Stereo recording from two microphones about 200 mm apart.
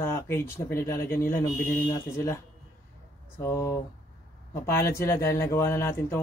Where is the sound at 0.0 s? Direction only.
10° left (ahead or behind).